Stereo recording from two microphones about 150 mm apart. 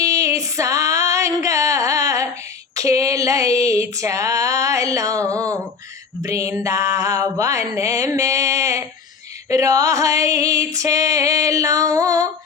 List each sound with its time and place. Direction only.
0.0 s female singing: 20° right (ahead or behind)
2.7 s a sound: 20° right (ahead or behind)
9.5 s music: 20° right (ahead or behind)